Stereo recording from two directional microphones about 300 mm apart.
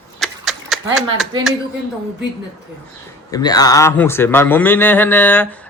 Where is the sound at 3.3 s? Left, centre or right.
Centre.